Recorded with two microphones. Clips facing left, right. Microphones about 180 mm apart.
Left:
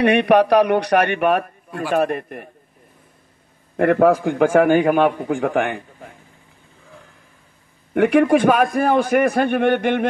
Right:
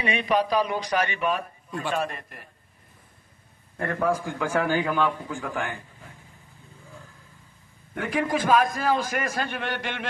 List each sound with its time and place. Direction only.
0.0 s a man's voice: 70° left (ahead or behind)
3.7 s a man's voice: 80° left
7.9 s a man's voice: 70° left (ahead or behind)